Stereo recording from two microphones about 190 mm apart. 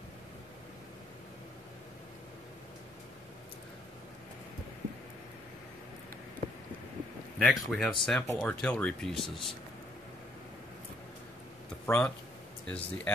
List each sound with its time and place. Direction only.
7.3 s speech: centre (ahead or behind)
11.8 s speech: 5° left (ahead or behind)